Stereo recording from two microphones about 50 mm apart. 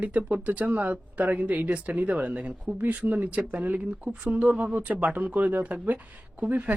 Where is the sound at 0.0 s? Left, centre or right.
Right.